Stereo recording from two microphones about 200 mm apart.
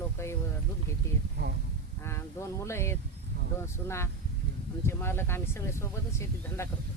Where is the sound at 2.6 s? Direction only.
15° left (ahead or behind).